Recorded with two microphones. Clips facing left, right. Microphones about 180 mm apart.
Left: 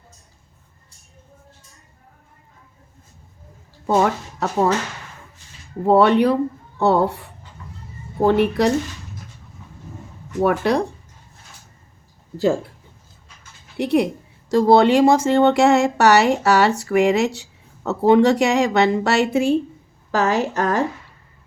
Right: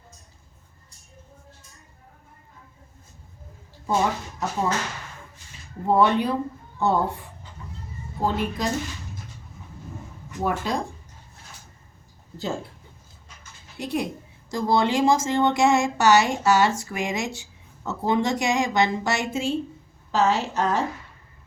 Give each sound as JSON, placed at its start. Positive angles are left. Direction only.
{"t": 3.8, "sound": "speech", "side_deg": 70}
{"t": 5.8, "sound": "speech", "side_deg": 70}
{"t": 10.4, "sound": "speech", "side_deg": 70}
{"t": 13.7, "sound": "speech", "side_deg": 65}